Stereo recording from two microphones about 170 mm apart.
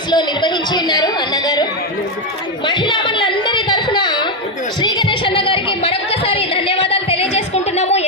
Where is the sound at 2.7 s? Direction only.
30° left (ahead or behind).